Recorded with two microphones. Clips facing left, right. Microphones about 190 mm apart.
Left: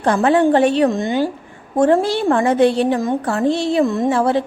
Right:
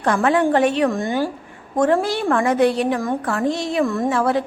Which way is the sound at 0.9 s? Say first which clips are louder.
Left 3 dB; 20° left (ahead or behind).